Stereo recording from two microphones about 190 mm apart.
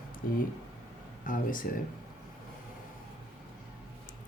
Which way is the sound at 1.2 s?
45° left (ahead or behind).